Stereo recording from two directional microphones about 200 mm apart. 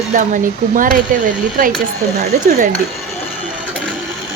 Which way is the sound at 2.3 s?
40° right (ahead or behind).